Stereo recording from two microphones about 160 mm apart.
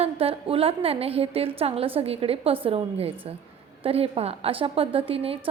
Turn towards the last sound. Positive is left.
turn(degrees=-35)  # may be behind; listen again after turning